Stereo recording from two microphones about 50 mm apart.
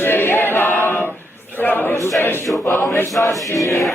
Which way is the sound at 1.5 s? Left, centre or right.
Left.